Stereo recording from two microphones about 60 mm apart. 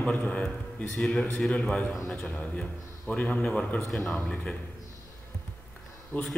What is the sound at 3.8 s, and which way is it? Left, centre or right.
Speech, centre.